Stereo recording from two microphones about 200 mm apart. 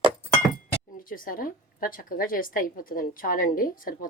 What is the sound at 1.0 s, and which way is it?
A woman's voice, 45° left (ahead or behind).